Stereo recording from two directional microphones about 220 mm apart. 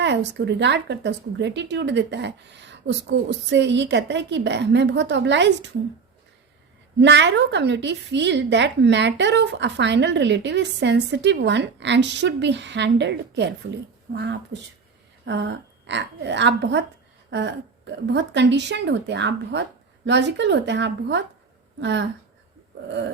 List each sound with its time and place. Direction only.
0.3 s a woman's voice: 50° right (ahead or behind)
7.0 s a woman's voice: 55° right (ahead or behind)
18.1 s a woman's voice: 55° right (ahead or behind)